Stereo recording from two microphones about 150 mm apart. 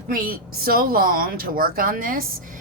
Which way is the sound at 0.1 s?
75° right (ahead or behind).